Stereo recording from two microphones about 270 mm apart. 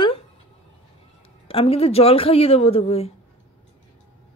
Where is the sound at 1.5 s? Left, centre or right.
Left.